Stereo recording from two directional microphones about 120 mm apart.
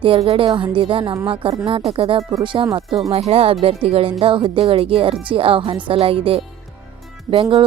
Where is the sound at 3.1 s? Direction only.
55° right (ahead or behind).